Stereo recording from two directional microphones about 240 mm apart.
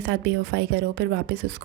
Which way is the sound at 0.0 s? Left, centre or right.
Right.